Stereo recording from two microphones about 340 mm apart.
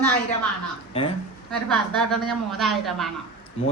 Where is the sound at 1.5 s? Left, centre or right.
Centre.